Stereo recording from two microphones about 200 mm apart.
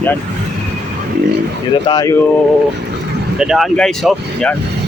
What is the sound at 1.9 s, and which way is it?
Speech, 15° left (ahead or behind).